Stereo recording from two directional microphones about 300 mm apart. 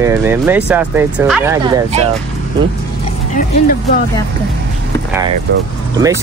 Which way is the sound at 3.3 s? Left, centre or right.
Left.